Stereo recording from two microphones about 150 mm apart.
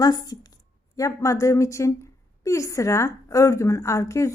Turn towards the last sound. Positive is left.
turn(degrees=20)  # may be behind; listen again after turning